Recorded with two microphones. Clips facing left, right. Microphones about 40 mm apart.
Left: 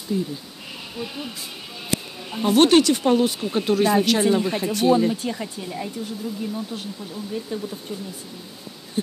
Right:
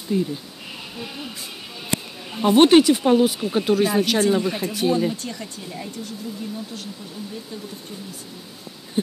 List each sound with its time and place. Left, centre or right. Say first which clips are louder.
0.1 s speech: right 3 dB; right
0.9 s speech: left 3 dB; centre
5.1 s speech: left 4 dB; centre
9.0 s a sound: right 2 dB; right